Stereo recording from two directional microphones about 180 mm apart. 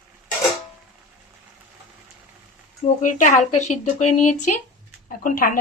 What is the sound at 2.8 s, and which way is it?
Speech, 45° left (ahead or behind).